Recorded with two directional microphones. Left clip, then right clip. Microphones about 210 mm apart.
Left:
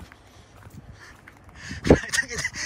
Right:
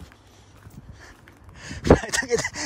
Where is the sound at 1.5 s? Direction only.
25° right (ahead or behind).